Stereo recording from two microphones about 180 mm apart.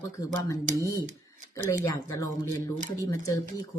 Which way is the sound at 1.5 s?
15° left (ahead or behind).